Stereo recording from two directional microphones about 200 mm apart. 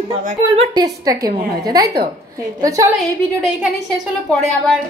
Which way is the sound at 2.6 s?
15° right (ahead or behind).